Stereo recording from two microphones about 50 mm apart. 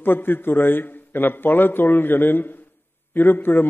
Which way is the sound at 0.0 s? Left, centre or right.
Left.